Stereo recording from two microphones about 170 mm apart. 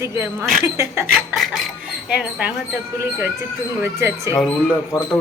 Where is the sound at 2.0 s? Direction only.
5° right (ahead or behind).